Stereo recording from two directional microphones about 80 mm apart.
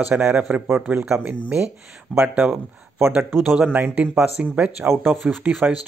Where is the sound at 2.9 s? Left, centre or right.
Right.